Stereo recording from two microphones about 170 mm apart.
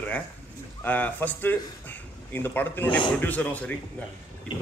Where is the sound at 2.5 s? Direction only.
10° left (ahead or behind).